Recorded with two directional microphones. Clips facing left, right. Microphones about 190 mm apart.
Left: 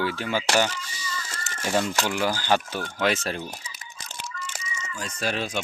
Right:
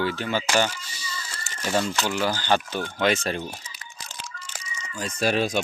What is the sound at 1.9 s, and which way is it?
Speech, 10° left (ahead or behind).